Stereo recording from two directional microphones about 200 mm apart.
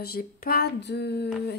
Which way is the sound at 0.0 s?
50° left (ahead or behind).